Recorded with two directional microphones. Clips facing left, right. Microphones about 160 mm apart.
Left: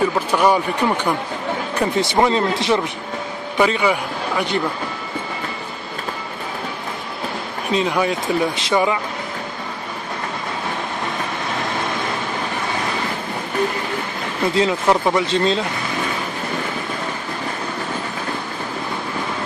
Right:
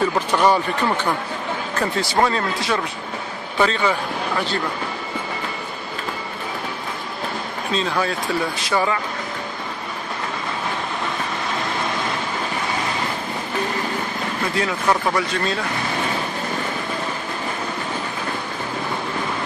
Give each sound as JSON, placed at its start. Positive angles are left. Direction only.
{"t": 0.3, "sound": "a man's voice", "side_deg": 10}
{"t": 7.7, "sound": "speech", "side_deg": 15}
{"t": 14.5, "sound": "speech", "side_deg": 25}